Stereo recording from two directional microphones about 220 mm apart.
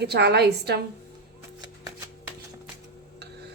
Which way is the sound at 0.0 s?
50° right (ahead or behind).